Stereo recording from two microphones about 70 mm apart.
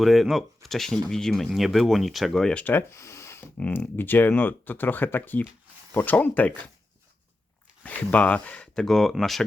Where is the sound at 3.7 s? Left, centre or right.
Left.